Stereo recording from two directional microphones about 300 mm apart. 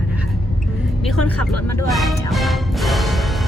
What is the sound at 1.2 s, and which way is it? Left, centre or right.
Speech, left.